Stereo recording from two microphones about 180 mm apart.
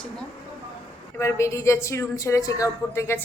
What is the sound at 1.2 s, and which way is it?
A woman's voice, 15° left (ahead or behind).